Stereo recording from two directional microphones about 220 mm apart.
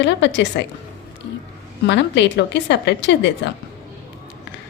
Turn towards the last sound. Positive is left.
turn(degrees=55)  # may be behind; listen again after turning